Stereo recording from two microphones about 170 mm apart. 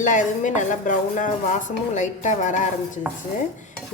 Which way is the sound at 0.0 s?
50° left (ahead or behind).